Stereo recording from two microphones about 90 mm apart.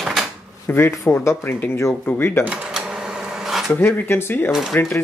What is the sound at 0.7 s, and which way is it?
Speech, 25° left (ahead or behind).